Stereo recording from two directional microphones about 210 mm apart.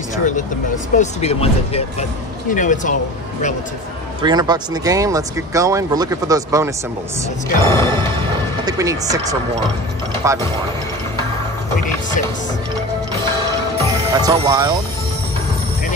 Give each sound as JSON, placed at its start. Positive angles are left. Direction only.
{"t": 0.9, "sound": "speech", "side_deg": 30}
{"t": 4.2, "sound": "speech", "side_deg": -20}
{"t": 7.6, "sound": "music", "side_deg": 15}
{"t": 8.6, "sound": "speech", "side_deg": -15}
{"t": 13.8, "sound": "speech", "side_deg": -20}